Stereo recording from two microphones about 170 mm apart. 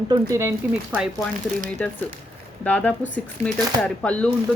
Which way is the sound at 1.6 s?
10° left (ahead or behind).